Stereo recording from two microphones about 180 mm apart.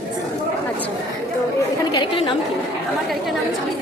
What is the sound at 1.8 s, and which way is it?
Chatter, 25° left (ahead or behind).